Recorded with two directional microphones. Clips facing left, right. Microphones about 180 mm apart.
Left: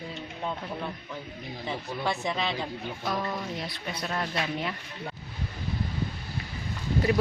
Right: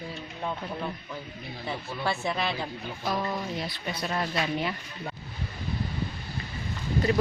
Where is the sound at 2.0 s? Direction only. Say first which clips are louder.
Right 1 dB; 15° left (ahead or behind).